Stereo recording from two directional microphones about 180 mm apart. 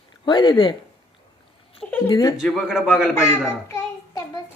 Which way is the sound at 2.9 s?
10° left (ahead or behind).